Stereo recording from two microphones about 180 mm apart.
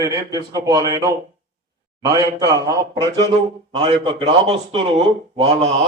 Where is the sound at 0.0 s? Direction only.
20° right (ahead or behind).